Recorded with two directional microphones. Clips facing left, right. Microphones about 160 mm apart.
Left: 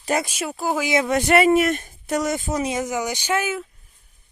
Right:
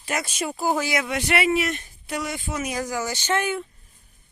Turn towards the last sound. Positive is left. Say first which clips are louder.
# left 1 dB
turn(degrees=5)  # may be behind; listen again after turning